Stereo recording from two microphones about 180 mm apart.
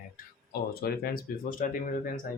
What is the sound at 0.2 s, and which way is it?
Speech, 50° left (ahead or behind).